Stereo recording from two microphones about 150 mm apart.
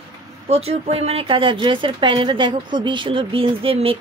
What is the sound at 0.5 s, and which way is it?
A woman's voice, 45° right (ahead or behind).